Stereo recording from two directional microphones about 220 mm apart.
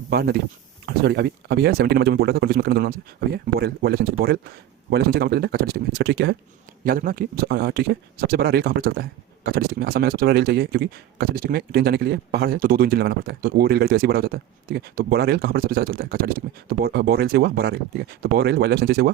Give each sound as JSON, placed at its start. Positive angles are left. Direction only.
{"t": 0.1, "sound": "a man's voice", "side_deg": -45}